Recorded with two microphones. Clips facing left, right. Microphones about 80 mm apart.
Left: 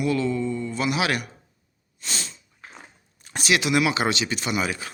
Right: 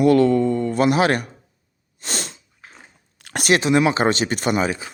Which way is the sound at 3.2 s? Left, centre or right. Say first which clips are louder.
Right 7 dB; right.